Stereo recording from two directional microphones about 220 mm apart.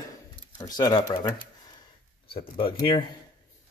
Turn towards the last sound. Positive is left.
turn(degrees=25)  # may be behind; listen again after turning